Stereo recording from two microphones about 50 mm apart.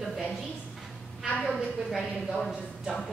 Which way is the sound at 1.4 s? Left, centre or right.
Centre.